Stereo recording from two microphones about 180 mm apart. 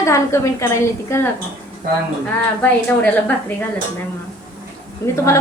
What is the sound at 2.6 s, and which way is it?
Speech, 5° left (ahead or behind).